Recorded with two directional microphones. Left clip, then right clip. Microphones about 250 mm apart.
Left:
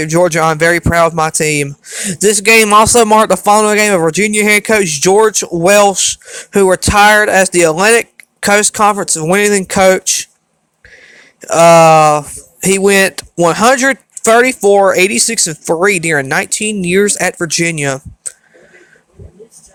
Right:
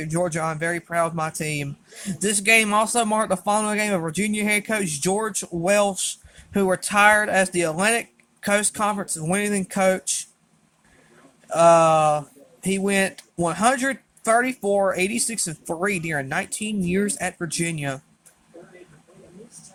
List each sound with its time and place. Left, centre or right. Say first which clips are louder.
0.0 s speech: left 14 dB; left
11.4 s speech: left 10 dB; left